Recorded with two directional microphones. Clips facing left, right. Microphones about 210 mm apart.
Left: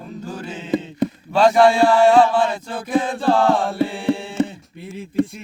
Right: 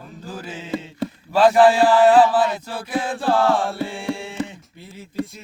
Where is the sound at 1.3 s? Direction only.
5° right (ahead or behind).